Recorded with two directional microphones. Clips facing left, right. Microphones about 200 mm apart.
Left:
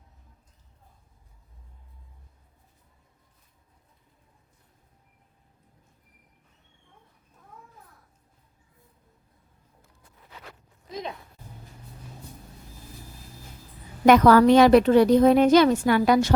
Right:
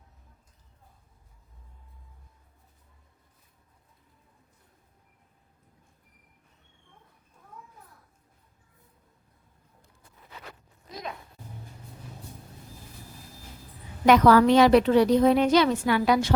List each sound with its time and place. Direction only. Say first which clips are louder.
14.0 s a woman's voice: left 2 dB; 50° left (ahead or behind)